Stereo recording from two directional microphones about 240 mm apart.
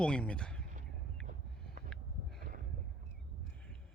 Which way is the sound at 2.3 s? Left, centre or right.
Right.